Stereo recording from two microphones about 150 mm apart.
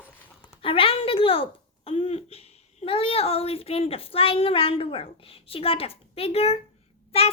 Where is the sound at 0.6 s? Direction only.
40° left (ahead or behind).